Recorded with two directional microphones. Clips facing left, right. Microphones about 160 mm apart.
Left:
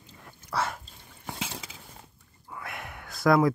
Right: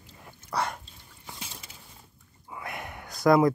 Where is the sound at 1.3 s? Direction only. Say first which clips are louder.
Left 7 dB; 85° left.